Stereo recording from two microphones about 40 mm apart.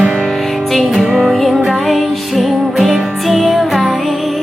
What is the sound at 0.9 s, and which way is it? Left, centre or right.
Music, centre.